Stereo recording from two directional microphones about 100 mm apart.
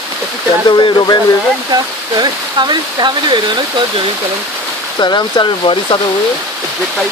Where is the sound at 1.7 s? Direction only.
45° right (ahead or behind).